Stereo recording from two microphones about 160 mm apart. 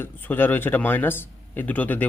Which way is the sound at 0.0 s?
15° left (ahead or behind).